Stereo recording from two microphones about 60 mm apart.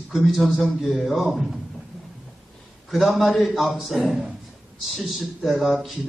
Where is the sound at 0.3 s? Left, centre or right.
Centre.